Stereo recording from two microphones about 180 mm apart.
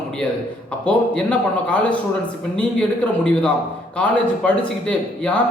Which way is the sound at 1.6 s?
5° left (ahead or behind).